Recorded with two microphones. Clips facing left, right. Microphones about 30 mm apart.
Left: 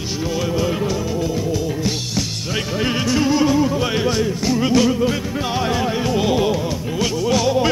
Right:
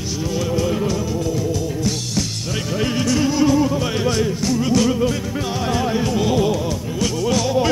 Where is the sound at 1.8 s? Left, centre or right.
Centre.